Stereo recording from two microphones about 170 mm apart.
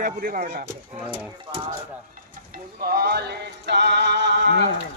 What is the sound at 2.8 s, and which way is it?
Music, 65° right (ahead or behind).